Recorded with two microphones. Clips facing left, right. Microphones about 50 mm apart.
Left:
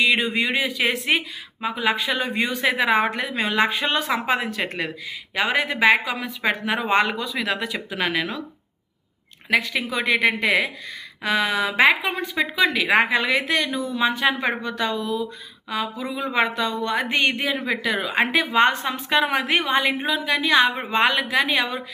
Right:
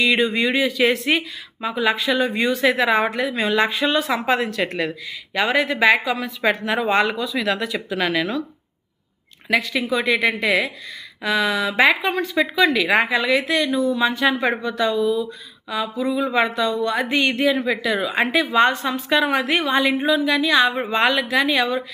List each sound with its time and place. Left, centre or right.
0.0 s speech: left
9.5 s speech: left
13.0 s speech: left